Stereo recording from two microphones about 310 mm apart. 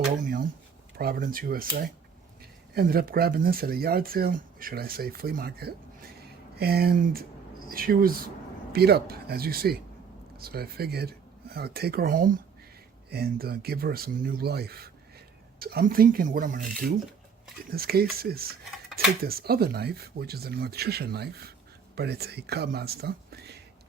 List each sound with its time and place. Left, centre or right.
0.2 s a sound: right
0.9 s speech: right
17.7 s speech: right